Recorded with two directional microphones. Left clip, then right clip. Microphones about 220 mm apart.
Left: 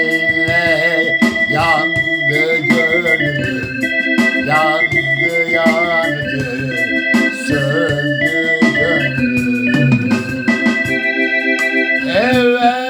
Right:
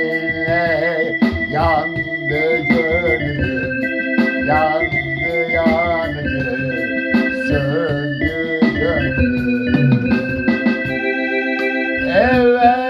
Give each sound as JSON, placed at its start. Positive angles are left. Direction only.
{"t": 0.5, "sound": "music", "side_deg": 5}
{"t": 9.7, "sound": "organ", "side_deg": 45}
{"t": 12.1, "sound": "music", "side_deg": 10}